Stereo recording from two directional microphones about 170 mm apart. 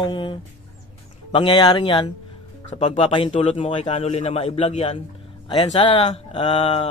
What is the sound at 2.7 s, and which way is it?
Speech, 45° left (ahead or behind).